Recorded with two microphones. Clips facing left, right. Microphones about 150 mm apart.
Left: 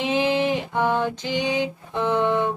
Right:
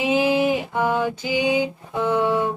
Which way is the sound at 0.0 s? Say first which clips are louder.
Right 2 dB; 5° right (ahead or behind).